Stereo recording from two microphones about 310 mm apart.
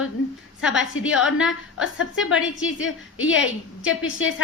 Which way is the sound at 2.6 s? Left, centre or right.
Left.